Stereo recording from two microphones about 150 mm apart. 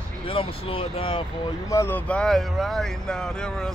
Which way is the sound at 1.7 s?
15° left (ahead or behind).